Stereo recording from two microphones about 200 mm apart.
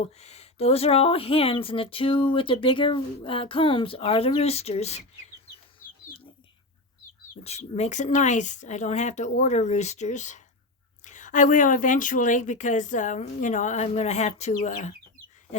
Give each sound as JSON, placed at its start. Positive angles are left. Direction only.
{"t": 0.2, "sound": "speech", "side_deg": 30}
{"t": 7.4, "sound": "speech", "side_deg": 30}